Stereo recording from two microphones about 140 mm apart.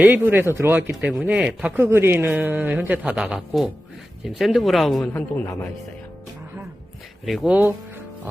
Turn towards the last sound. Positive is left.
turn(degrees=0)  # may be behind; listen again after turning